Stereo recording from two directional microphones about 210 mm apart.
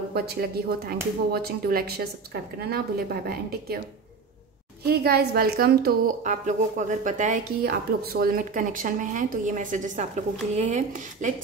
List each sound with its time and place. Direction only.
0.1 s a woman's voice: 45° right (ahead or behind)
4.8 s a woman's voice: 50° right (ahead or behind)